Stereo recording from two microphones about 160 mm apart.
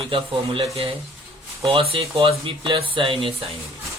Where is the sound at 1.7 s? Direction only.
35° right (ahead or behind).